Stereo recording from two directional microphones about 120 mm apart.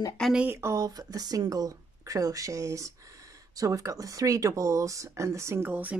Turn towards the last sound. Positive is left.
turn(degrees=-15)  # may be behind; listen again after turning